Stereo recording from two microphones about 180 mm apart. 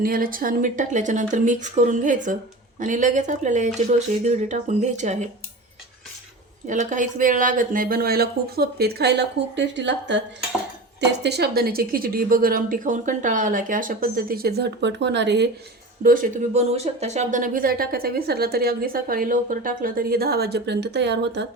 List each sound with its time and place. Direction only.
0.0 s speech: 50° right (ahead or behind)
6.7 s a woman's voice: 45° right (ahead or behind); by 10.2 s 80° right
11.2 s a woman's voice: 65° right (ahead or behind)
16.0 s a woman's voice: 50° right (ahead or behind); by 21.4 s 70° right (ahead or behind)